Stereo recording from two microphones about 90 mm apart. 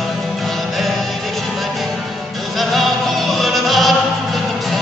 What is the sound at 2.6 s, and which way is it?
Music, centre (ahead or behind).